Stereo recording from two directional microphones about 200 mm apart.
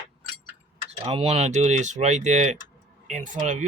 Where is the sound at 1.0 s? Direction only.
30° right (ahead or behind).